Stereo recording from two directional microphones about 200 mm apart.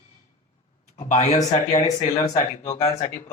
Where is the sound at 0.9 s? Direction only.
35° left (ahead or behind).